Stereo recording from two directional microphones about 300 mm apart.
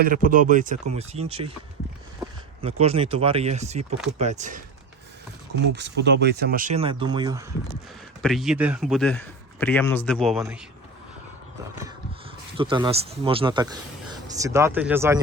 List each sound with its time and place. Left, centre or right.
0.0 s speech: right
2.6 s speech: centre
5.7 s speech: right; by 7.4 s centre
8.2 s a man's voice: centre
12.7 s speech: centre